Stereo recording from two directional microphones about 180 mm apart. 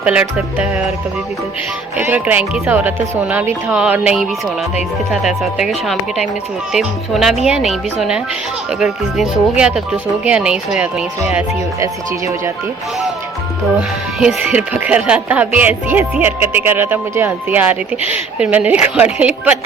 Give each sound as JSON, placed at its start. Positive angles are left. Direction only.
{"t": 0.0, "sound": "speech", "side_deg": -5}
{"t": 2.0, "sound": "speech", "side_deg": -10}
{"t": 11.8, "sound": "speech", "side_deg": -15}
{"t": 13.7, "sound": "speech", "side_deg": -5}